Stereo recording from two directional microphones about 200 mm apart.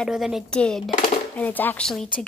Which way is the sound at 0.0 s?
Centre (ahead or behind).